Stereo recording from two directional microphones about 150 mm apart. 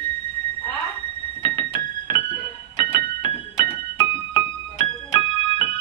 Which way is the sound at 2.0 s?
30° left (ahead or behind).